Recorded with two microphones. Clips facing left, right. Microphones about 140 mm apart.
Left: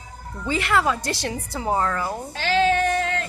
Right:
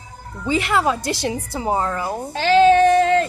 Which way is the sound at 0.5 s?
15° right (ahead or behind).